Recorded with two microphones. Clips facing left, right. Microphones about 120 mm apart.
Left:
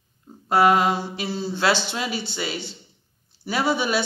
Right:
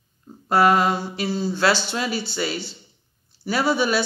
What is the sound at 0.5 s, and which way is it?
Speech, 20° left (ahead or behind).